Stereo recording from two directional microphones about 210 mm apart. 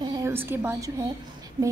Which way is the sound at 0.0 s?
15° right (ahead or behind).